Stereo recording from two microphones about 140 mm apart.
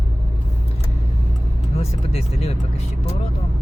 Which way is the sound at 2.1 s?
45° left (ahead or behind).